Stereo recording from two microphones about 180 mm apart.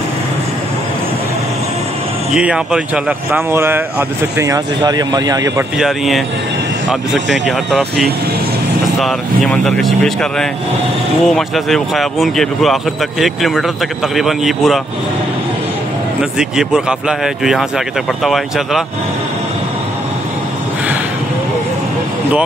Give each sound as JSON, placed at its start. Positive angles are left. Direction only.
{"t": 2.3, "sound": "speech", "side_deg": -5}
{"t": 5.8, "sound": "speech", "side_deg": 0}
{"t": 9.5, "sound": "speech", "side_deg": 0}
{"t": 16.2, "sound": "speech", "side_deg": -5}